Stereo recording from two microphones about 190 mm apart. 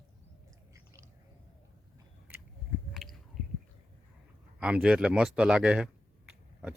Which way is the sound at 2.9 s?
Centre (ahead or behind).